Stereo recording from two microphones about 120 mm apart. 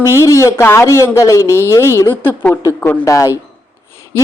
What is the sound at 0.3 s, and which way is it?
A woman's voice, 25° left (ahead or behind).